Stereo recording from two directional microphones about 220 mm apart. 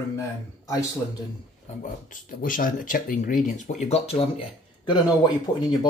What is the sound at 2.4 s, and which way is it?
Speech, 40° left (ahead or behind).